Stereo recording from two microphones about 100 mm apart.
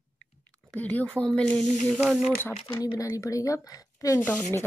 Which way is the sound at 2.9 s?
30° left (ahead or behind).